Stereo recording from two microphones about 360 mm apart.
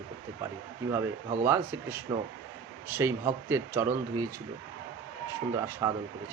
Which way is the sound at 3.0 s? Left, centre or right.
Centre.